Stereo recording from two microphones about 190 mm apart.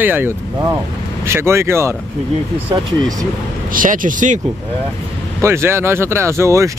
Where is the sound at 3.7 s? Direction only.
45° right (ahead or behind).